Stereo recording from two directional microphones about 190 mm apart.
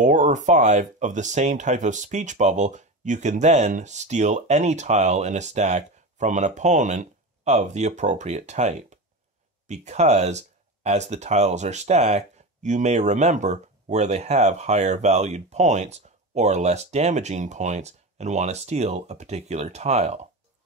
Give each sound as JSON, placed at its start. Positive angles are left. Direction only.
{"t": 0.0, "sound": "speech", "side_deg": -40}